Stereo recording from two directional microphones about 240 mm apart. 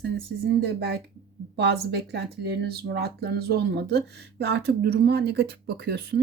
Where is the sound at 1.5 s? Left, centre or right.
Right.